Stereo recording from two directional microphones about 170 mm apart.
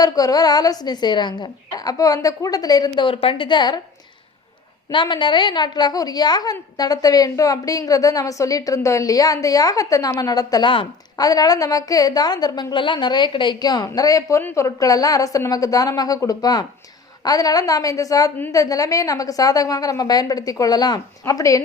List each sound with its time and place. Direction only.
0.0 s a woman's voice: 20° left (ahead or behind)
4.9 s a woman's voice: 30° left (ahead or behind)